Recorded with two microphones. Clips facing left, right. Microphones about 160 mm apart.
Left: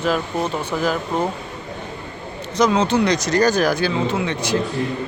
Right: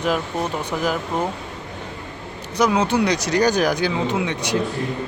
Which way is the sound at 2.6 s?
10° right (ahead or behind).